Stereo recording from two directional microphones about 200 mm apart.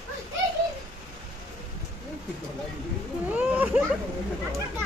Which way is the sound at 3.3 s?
5° right (ahead or behind).